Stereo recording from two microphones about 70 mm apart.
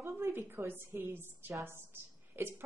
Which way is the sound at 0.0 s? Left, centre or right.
Right.